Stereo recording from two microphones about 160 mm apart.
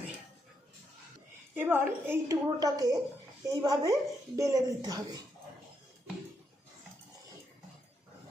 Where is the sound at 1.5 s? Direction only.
15° right (ahead or behind).